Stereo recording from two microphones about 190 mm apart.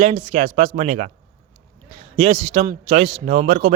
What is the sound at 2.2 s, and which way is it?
Speech, 40° right (ahead or behind).